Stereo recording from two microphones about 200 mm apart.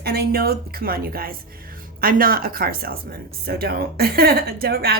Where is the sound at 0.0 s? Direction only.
50° right (ahead or behind).